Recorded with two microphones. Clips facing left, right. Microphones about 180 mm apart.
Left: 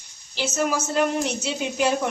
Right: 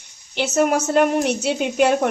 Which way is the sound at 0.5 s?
65° right (ahead or behind).